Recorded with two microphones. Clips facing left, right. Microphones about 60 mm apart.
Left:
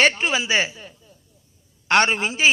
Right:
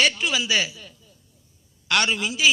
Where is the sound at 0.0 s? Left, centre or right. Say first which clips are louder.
Left 3 dB; left.